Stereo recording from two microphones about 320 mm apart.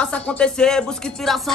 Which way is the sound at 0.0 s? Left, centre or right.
Centre.